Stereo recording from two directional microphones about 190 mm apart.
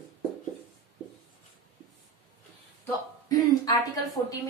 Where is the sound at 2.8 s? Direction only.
20° left (ahead or behind).